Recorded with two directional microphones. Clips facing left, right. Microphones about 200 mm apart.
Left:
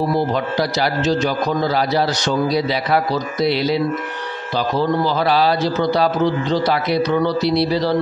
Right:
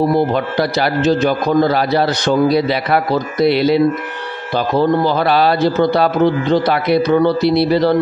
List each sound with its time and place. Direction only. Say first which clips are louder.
0.1 s a man's voice: right 4 dB; 55° right (ahead or behind)